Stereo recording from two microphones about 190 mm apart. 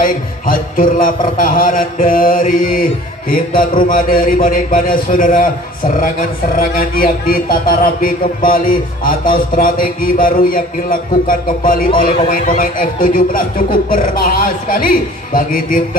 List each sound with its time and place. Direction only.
0.0 s a man's voice: 50° left (ahead or behind)
6.6 s a man's voice: 50° left (ahead or behind)